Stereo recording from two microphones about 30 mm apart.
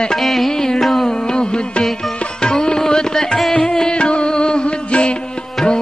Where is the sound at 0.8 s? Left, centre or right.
Centre.